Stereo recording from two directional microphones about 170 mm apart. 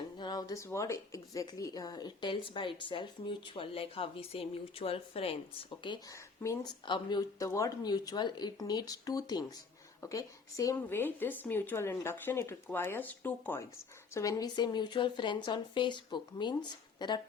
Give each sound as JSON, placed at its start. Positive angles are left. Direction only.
{"t": 0.2, "sound": "speech", "side_deg": 25}